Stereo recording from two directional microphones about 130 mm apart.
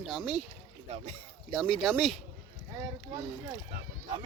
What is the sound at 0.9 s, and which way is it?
Speech, 50° right (ahead or behind).